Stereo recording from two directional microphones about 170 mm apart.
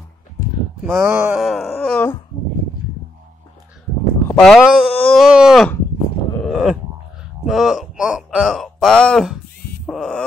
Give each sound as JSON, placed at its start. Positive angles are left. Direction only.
{"t": 0.8, "sound": "wail", "side_deg": -10}
{"t": 4.3, "sound": "wail", "side_deg": 5}
{"t": 6.4, "sound": "cattle", "side_deg": -5}
{"t": 7.4, "sound": "speech", "side_deg": 0}
{"t": 9.8, "sound": "a sound", "side_deg": 0}